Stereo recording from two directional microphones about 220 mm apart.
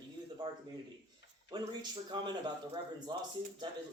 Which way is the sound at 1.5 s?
20° right (ahead or behind).